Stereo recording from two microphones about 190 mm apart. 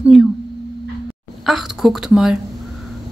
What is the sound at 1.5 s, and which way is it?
Speech, centre (ahead or behind).